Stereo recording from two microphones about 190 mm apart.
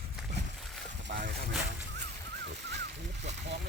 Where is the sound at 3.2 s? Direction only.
65° right (ahead or behind).